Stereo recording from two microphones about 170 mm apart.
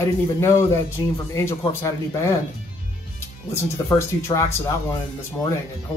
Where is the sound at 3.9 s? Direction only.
15° left (ahead or behind).